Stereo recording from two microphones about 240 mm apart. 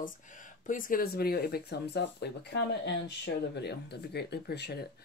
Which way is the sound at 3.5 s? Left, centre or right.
Left.